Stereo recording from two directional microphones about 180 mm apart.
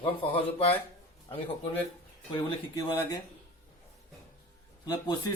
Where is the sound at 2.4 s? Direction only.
25° left (ahead or behind).